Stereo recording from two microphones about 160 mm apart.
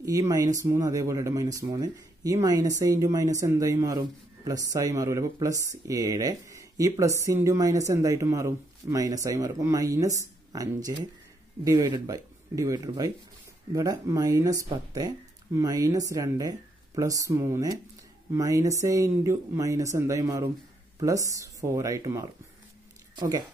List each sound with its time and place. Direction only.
0.0 s speech: 20° right (ahead or behind)